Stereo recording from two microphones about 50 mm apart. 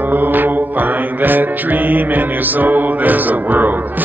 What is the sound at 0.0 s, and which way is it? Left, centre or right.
Music, right.